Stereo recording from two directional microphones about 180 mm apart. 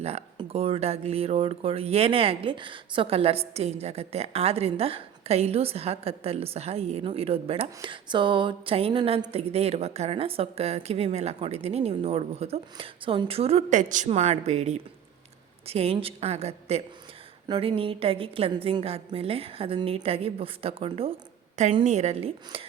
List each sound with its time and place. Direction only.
0.0 s speech: 35° right (ahead or behind)